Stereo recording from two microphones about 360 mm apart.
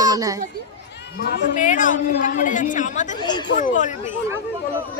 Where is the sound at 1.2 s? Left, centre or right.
Left.